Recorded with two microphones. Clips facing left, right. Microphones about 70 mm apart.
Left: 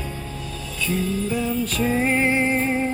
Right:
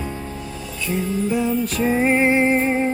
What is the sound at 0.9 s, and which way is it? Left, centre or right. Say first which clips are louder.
Music: right 3 dB; centre.